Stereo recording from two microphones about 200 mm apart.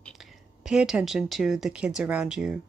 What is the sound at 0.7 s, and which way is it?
Speech, 5° right (ahead or behind).